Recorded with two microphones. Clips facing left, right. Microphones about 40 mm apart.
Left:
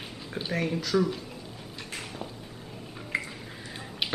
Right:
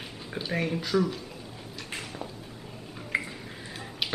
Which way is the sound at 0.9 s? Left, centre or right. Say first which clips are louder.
Left 1 dB; centre.